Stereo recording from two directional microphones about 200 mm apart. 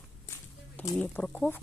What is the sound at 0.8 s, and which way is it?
Speech, 5° left (ahead or behind).